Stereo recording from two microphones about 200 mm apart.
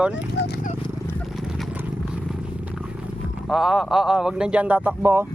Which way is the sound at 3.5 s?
Centre (ahead or behind).